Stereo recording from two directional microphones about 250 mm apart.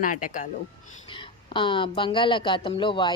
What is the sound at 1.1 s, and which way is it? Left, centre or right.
Speech, centre.